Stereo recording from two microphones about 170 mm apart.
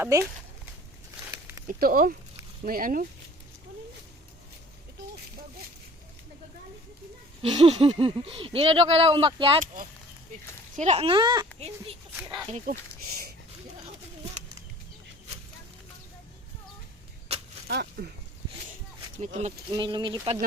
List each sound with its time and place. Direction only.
0.0 s speech: 15° right (ahead or behind)
1.3 s a sound: 20° right (ahead or behind)
1.6 s speech: 55° right (ahead or behind)
7.4 s speech: 30° right (ahead or behind)
10.8 s speech: 40° right (ahead or behind)
12.6 s a sound: 60° right (ahead or behind)
17.7 s speech: 70° right (ahead or behind)
19.2 s speech: 40° right (ahead or behind)
19.7 s speech: 30° right (ahead or behind)